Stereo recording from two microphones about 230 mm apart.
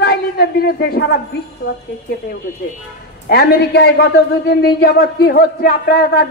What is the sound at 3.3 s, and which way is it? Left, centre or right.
A man's voice, left.